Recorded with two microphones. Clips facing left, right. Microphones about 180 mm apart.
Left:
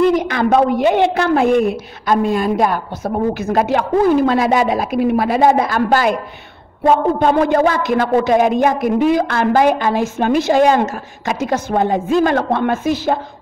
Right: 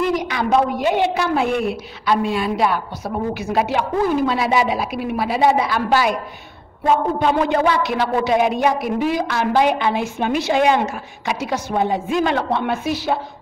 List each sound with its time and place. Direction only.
0.1 s a woman's voice: 50° left (ahead or behind)
7.2 s a woman's voice: 45° left (ahead or behind)